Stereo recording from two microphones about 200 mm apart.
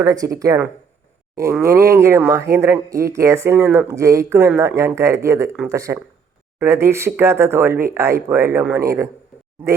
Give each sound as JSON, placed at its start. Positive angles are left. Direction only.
{"t": 0.0, "sound": "speech", "side_deg": -15}